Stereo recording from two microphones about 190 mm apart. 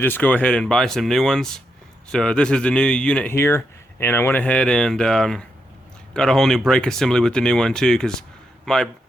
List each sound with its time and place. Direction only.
0.0 s speech: 10° left (ahead or behind)